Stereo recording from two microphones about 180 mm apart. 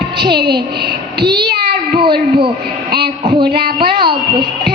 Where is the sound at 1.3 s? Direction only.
60° right (ahead or behind).